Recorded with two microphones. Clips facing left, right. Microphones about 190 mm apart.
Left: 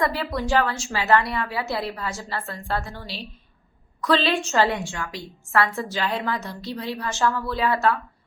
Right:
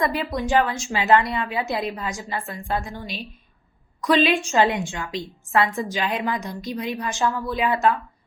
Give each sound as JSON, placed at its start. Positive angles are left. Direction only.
{"t": 0.0, "sound": "a woman's voice", "side_deg": -15}